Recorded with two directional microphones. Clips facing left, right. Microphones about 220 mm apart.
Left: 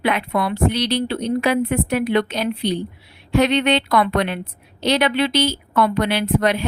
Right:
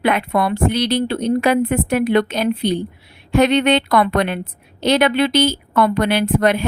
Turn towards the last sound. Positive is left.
turn(degrees=-50)  # may be behind; listen again after turning